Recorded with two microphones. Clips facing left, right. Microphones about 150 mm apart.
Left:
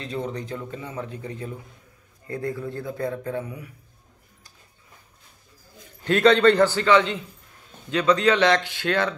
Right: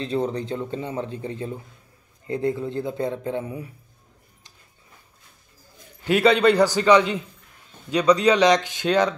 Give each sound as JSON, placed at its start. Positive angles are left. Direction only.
{"t": 0.0, "sound": "speech", "side_deg": -30}
{"t": 6.0, "sound": "a man's voice", "side_deg": -10}